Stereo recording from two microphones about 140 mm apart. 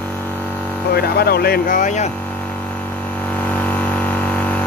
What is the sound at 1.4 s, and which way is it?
Speech, 85° left.